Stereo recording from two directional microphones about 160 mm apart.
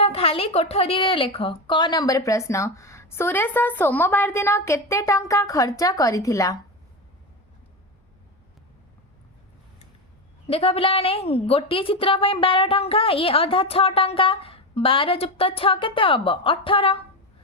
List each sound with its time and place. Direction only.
0.0 s a woman's voice: 40° left (ahead or behind); by 6.6 s 20° left (ahead or behind)
10.4 s a woman's voice: 35° left (ahead or behind)